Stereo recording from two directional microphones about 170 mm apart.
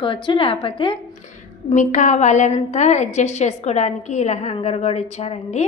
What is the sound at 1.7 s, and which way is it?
A woman's voice, 45° left (ahead or behind).